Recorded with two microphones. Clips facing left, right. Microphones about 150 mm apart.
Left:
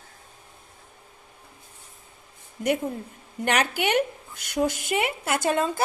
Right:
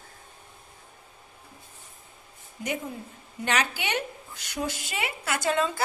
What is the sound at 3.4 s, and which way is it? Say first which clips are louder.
Speech: left 4 dB; 55° left (ahead or behind).